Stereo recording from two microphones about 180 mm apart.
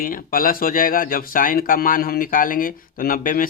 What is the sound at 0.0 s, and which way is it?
Speech, 50° left (ahead or behind).